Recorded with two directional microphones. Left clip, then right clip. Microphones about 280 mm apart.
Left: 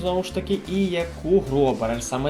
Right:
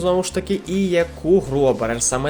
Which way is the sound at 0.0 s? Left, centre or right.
Right.